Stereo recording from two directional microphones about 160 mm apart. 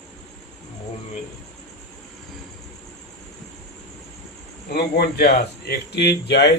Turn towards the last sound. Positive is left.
turn(degrees=90)